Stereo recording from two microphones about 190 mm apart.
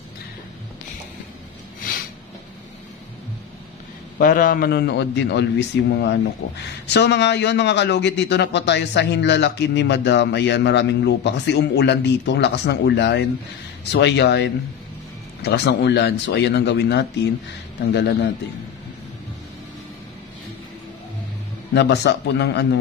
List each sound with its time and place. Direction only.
4.2 s a man's voice: 45° left (ahead or behind)
21.7 s a man's voice: 65° left (ahead or behind)